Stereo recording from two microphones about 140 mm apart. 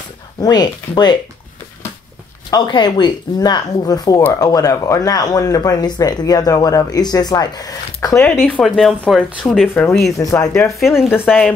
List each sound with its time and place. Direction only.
0.4 s speech: 30° left (ahead or behind)
2.5 s speech: 30° left (ahead or behind)
8.3 s speech: 5° left (ahead or behind)
10.1 s speech: 25° left (ahead or behind)
10.8 s speech: 5° right (ahead or behind)